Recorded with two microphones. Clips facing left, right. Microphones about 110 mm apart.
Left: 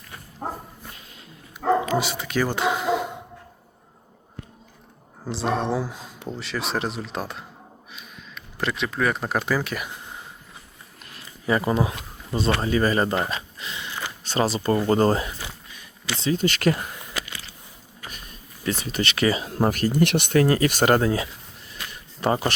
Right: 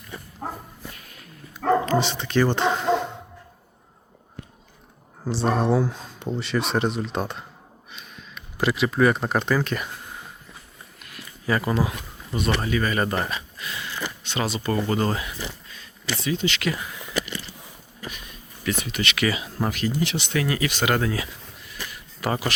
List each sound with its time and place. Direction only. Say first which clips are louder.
0.4 s dog: left 2 dB; 10° left (ahead or behind)
0.9 s a sound: even; 25° left (ahead or behind)
1.6 s dog: right 1 dB; 5° left (ahead or behind)
5.2 s speech: right 2 dB; centre (ahead or behind)
9.9 s a sound: even; 20° left (ahead or behind)
11.4 s speech: left 1 dB; 25° left (ahead or behind)
14.3 s speech: left 5 dB; 35° left (ahead or behind)
18.1 s a sound: right 1 dB; 35° left (ahead or behind)
19.5 s speech: left 4 dB; 40° left (ahead or behind)
20.4 s speech: left 4 dB; 40° left (ahead or behind)